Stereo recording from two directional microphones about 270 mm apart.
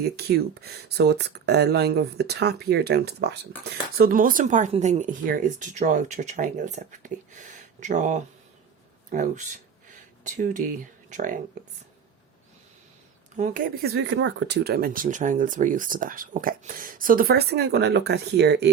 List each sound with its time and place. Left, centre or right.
0.0 s speech: right
13.3 s speech: right